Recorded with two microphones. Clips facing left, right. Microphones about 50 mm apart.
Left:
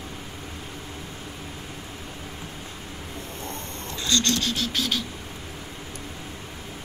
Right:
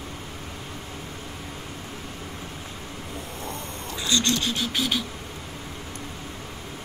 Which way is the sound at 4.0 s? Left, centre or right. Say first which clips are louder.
Even; centre.